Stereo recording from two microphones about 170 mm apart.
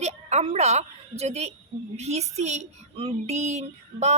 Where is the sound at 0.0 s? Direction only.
40° right (ahead or behind).